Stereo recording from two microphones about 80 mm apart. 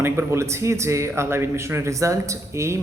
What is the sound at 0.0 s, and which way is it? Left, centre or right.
A man's voice, right.